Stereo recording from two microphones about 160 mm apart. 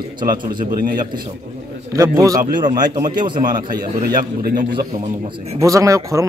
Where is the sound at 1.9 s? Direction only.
20° right (ahead or behind).